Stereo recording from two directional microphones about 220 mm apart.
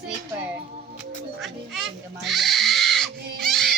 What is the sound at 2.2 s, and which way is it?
Music, centre (ahead or behind).